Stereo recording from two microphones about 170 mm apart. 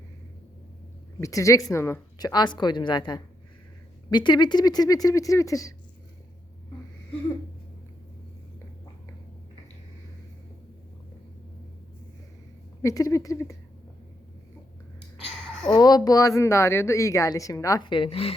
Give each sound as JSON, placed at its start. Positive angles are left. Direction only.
{"t": 1.2, "sound": "a woman's voice", "side_deg": 20}
{"t": 12.8, "sound": "a woman's voice", "side_deg": 20}
{"t": 15.6, "sound": "a woman's voice", "side_deg": 25}